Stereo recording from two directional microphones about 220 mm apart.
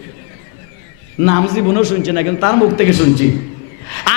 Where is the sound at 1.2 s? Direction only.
15° left (ahead or behind).